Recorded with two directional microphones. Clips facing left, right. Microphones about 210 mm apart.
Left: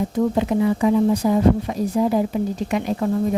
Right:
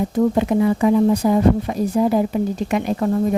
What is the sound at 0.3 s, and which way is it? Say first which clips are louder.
A woman's voice: right 2 dB; 55° right (ahead or behind).